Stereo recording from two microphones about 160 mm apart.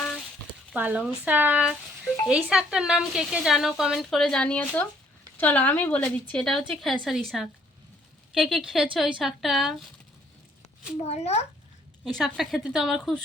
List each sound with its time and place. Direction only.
0.7 s a woman's voice: 10° right (ahead or behind)
11.0 s speech: 45° left (ahead or behind)
12.0 s a woman's voice: centre (ahead or behind)